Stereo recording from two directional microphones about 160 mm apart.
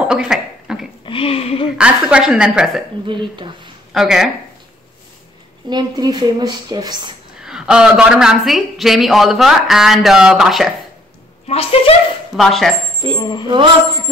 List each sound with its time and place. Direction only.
0.0 s a sound: 5° right (ahead or behind)
1.0 s speech: 35° left (ahead or behind)
1.8 s a man's voice: 5° right (ahead or behind)
3.1 s speech: 30° right (ahead or behind)
3.9 s speech: 5° right (ahead or behind)
5.7 s a woman's voice: 25° right (ahead or behind)
7.4 s a man's voice: 5° right (ahead or behind)
11.4 s speech: 35° left (ahead or behind)
12.4 s a man's voice: centre (ahead or behind)
13.2 s speech: 30° left (ahead or behind)
13.5 s speech: 30° right (ahead or behind)